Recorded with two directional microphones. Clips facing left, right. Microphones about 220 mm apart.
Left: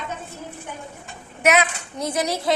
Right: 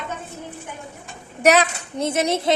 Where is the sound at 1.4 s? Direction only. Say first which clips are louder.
Right 3 dB; 35° right (ahead or behind).